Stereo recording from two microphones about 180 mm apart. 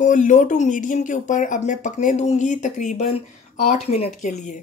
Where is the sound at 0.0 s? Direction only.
45° left (ahead or behind).